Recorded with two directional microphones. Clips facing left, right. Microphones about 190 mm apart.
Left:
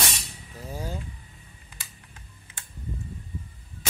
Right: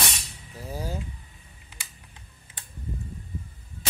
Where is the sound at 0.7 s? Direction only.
15° right (ahead or behind).